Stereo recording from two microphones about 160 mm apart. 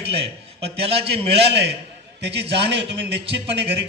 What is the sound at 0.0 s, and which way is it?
A man's voice, 40° right (ahead or behind).